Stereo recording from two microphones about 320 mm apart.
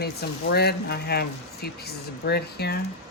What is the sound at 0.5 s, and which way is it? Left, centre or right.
Speech, left.